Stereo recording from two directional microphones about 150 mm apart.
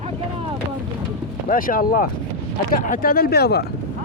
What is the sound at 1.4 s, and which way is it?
Speech, 65° left (ahead or behind).